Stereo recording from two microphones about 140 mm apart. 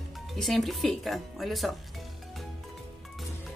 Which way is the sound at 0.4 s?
Centre (ahead or behind).